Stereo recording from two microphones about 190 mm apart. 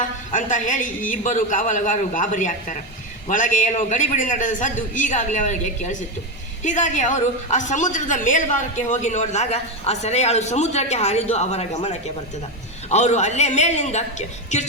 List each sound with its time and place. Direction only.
0.0 s a woman's voice: 40° left (ahead or behind)